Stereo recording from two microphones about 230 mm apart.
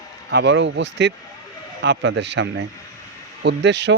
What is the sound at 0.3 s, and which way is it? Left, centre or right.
Speech, right.